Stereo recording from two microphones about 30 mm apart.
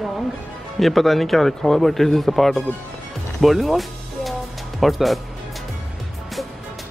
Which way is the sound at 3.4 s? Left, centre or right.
Centre.